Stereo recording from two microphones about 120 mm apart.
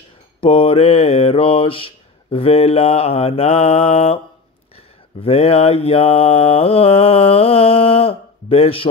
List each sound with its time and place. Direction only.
0.4 s mantra: 55° left (ahead or behind)
5.2 s mantra: 55° left (ahead or behind)